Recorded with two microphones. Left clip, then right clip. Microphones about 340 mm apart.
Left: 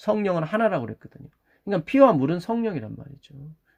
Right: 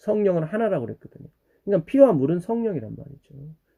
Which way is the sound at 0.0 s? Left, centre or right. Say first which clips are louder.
Right 2 dB; centre.